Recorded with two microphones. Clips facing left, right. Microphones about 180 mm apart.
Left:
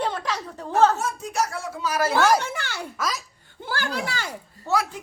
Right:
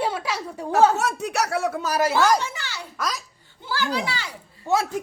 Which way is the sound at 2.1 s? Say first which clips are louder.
Left 1 dB; 5° left (ahead or behind).